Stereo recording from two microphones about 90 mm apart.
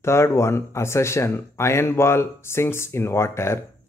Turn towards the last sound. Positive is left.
turn(degrees=30)  # may be behind; listen again after turning